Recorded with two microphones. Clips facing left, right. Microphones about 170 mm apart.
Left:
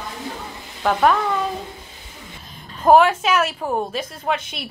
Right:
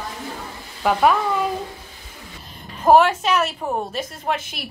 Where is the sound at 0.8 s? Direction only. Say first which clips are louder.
Even; 5° right (ahead or behind).